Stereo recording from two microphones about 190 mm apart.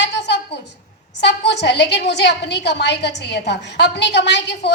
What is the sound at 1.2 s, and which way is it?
A woman's voice, 65° left (ahead or behind).